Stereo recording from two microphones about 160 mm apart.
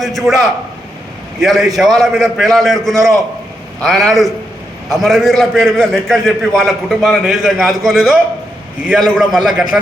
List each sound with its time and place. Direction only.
0.0 s a man's voice: centre (ahead or behind)
9.1 s a man's voice: 5° right (ahead or behind)